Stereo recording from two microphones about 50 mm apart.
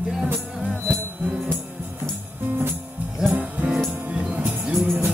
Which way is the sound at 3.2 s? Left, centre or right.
Centre.